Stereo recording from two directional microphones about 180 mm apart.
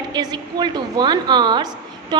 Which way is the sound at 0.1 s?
25° right (ahead or behind).